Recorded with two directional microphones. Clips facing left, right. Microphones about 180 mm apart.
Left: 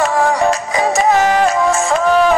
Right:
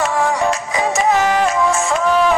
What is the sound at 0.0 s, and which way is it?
Music, 35° left (ahead or behind).